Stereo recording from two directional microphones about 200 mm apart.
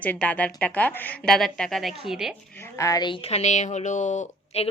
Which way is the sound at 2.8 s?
20° left (ahead or behind).